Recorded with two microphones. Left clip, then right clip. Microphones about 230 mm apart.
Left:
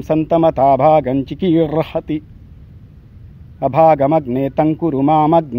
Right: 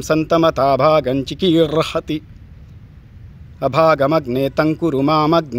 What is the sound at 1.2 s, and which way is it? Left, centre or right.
Speech, right.